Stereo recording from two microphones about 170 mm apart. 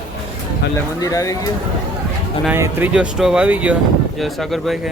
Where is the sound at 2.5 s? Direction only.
10° right (ahead or behind).